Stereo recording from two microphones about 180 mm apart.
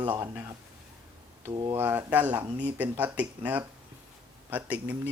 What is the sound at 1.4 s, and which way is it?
Speech, 20° right (ahead or behind).